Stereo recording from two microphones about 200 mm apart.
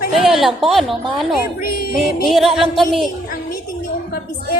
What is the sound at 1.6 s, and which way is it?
Speech, 50° left (ahead or behind).